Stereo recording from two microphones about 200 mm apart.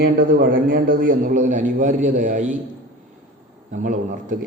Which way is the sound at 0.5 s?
45° right (ahead or behind).